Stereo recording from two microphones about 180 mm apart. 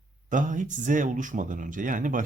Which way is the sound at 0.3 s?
45° right (ahead or behind).